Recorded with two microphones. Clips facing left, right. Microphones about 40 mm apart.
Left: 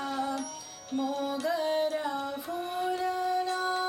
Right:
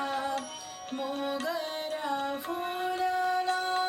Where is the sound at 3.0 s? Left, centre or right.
Centre.